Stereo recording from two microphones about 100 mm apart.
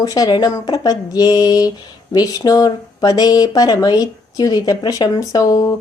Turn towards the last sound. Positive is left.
turn(degrees=40)  # may be behind; listen again after turning